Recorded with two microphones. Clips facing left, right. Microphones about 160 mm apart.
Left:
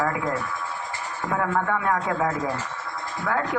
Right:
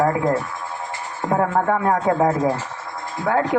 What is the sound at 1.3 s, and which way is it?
Speech, 35° right (ahead or behind).